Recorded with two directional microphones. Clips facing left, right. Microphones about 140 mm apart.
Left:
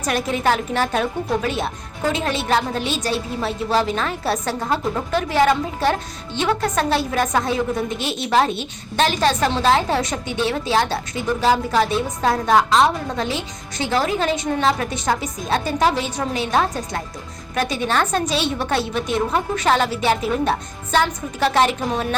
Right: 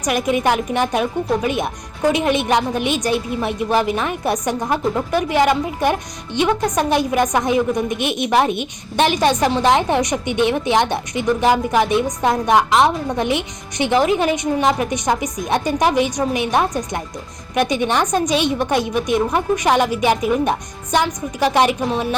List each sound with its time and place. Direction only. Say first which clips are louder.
0.0 s a woman's voice: right 3 dB; 15° right (ahead or behind)